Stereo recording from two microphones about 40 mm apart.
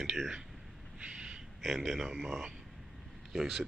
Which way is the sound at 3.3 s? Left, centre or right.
Centre.